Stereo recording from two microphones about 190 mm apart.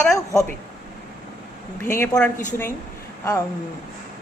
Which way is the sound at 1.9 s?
10° left (ahead or behind).